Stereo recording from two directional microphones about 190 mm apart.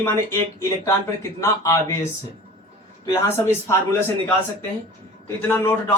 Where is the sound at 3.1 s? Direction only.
15° left (ahead or behind).